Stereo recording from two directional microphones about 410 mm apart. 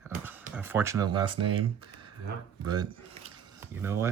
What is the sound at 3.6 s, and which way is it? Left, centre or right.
Speech, centre.